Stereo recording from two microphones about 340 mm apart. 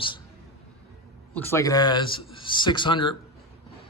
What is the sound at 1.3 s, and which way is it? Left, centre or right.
A man's voice, centre.